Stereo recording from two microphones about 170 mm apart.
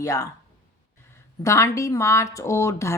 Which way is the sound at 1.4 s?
20° left (ahead or behind).